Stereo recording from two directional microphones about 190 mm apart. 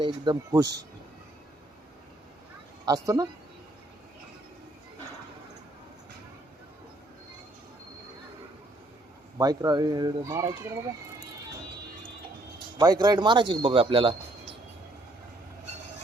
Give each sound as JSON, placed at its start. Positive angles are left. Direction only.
{"t": 0.0, "sound": "a man's voice", "side_deg": -20}
{"t": 2.8, "sound": "a man's voice", "side_deg": -20}
{"t": 9.4, "sound": "a man's voice", "side_deg": -20}
{"t": 12.7, "sound": "a man's voice", "side_deg": -20}